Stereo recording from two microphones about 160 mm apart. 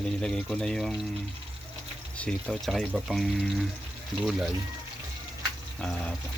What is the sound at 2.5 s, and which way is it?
Speech, centre (ahead or behind).